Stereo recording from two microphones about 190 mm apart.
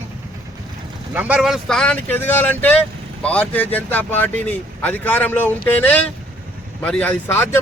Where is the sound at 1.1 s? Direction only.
10° right (ahead or behind).